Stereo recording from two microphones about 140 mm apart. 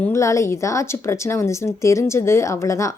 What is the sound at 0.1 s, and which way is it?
Speech, 20° left (ahead or behind).